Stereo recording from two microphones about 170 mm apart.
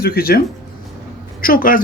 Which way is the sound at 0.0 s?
65° left (ahead or behind).